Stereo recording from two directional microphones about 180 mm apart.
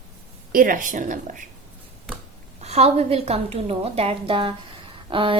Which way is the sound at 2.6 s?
35° right (ahead or behind).